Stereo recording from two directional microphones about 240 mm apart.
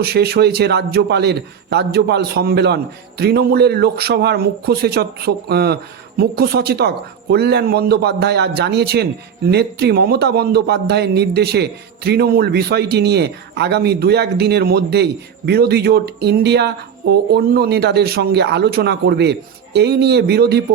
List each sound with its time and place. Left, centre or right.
0.0 s a man's voice: right